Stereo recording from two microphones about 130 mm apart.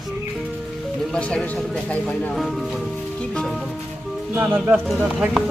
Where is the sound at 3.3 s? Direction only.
5° left (ahead or behind).